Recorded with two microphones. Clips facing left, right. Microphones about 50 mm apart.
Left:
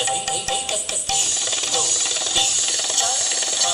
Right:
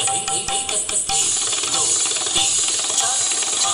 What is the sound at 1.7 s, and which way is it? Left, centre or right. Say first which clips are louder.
Jackhammer: even; centre.